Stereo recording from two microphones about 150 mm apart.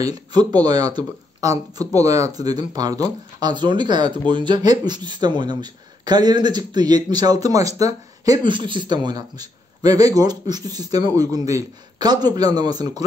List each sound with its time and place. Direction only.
0.0 s speech: 25° right (ahead or behind)